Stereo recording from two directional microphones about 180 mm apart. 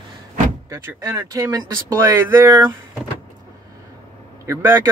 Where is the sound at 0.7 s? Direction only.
15° right (ahead or behind).